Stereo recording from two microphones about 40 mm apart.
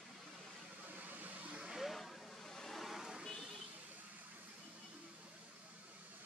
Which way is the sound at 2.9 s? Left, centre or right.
Centre.